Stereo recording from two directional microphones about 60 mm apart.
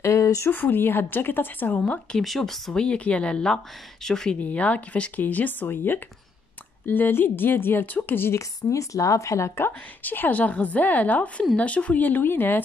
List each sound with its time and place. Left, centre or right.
0.0 s a sound: left
0.5 s a woman's voice: left
2.1 s speech: centre
4.4 s a woman's voice: left
8.4 s a woman's voice: left
9.6 s a woman's voice: left